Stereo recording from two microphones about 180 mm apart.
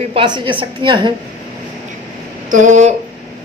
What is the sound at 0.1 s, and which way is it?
A woman's voice, 25° right (ahead or behind).